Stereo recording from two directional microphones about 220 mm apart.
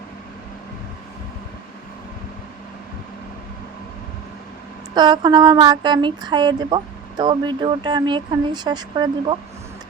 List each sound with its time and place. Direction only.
4.9 s speech: 20° right (ahead or behind)